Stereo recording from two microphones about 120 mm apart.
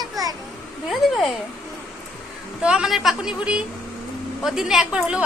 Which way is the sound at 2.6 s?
5° right (ahead or behind).